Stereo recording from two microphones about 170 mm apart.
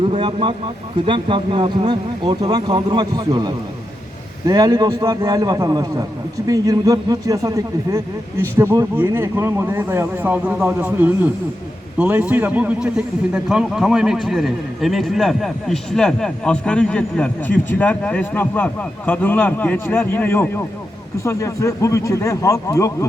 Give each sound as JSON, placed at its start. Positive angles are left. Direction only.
{"t": 0.0, "sound": "a man's voice", "side_deg": -30}